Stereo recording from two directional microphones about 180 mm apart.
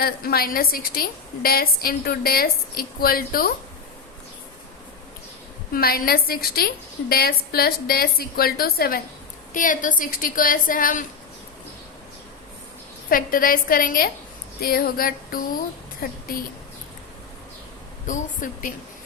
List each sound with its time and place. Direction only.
0.0 s a woman's voice: 55° left (ahead or behind)
5.7 s a woman's voice: 55° left (ahead or behind)
13.1 s a woman's voice: 50° left (ahead or behind)
18.0 s a woman's voice: 45° left (ahead or behind)